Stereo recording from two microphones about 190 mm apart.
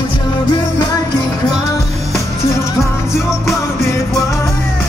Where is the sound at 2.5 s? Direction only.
15° left (ahead or behind).